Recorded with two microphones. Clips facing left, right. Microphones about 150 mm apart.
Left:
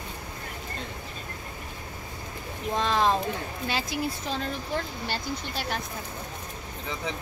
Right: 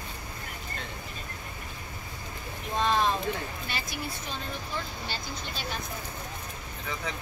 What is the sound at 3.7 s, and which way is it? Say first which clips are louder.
Speech: left 6 dB; 90° left.